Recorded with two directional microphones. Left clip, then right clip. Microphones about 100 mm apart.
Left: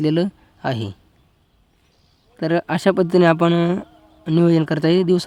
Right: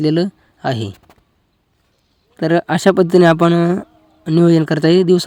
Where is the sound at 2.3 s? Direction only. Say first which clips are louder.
Right 5 dB; 35° right (ahead or behind).